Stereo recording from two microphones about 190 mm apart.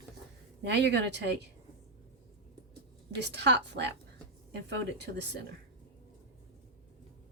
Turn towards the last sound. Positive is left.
turn(degrees=-65)  # may be behind; listen again after turning